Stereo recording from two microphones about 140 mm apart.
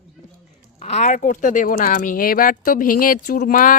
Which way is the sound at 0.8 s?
50° left (ahead or behind).